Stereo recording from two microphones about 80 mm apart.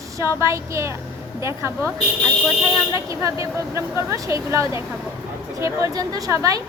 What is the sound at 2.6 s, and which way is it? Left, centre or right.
A woman's voice, right.